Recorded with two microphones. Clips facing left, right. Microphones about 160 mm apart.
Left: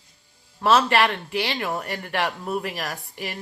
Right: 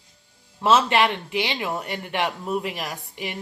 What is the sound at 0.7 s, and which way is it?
Speech, 20° right (ahead or behind).